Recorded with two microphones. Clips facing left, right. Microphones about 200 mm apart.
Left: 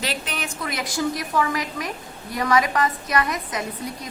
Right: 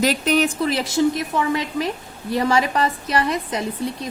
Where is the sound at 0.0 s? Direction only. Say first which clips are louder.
Right 11 dB; 40° right (ahead or behind).